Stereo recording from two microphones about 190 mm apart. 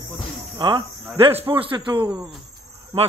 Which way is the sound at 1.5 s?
25° right (ahead or behind).